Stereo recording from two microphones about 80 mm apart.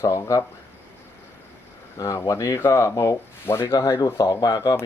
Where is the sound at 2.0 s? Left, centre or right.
Left.